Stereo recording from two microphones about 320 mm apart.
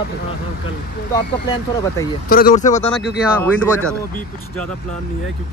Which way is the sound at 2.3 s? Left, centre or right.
Left.